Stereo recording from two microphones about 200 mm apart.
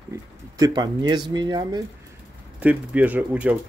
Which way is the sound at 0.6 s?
20° right (ahead or behind).